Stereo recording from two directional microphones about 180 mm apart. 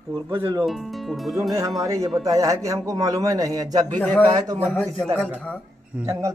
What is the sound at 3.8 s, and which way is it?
Speech, 10° left (ahead or behind).